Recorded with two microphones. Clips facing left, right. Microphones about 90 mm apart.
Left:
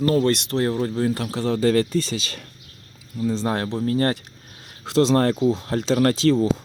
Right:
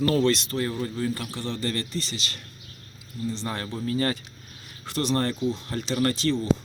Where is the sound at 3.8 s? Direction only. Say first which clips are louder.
Left 4 dB; 55° left (ahead or behind).